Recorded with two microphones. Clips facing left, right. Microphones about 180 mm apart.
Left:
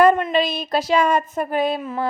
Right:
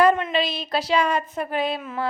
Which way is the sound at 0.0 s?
45° left (ahead or behind).